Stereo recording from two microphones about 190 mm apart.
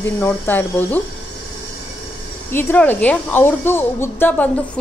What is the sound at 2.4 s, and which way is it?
A woman's voice, 10° left (ahead or behind).